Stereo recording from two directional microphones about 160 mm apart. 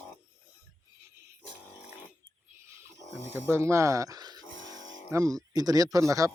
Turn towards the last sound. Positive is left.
turn(degrees=-20)  # may be behind; listen again after turning